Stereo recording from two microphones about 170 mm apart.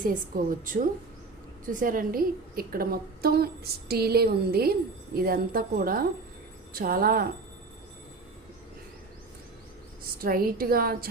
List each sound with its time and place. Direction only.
0.0 s a woman's voice: 55° right (ahead or behind)
10.2 s a woman's voice: 60° right (ahead or behind)